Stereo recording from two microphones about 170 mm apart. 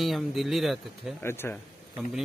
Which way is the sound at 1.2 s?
15° left (ahead or behind).